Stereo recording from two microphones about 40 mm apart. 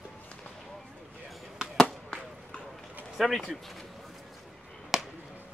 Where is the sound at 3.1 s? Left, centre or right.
Centre.